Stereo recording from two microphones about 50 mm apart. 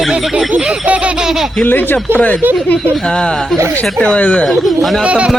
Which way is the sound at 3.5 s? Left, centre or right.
Right.